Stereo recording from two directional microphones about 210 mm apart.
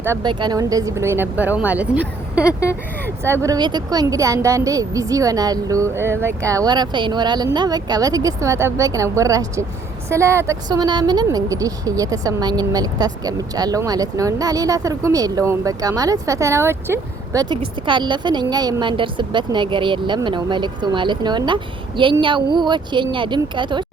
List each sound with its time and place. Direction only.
0.0 s speech: 15° right (ahead or behind)
2.4 s speech: 15° left (ahead or behind)
3.2 s speech: 15° right (ahead or behind)
17.5 s a woman's voice: 20° right (ahead or behind)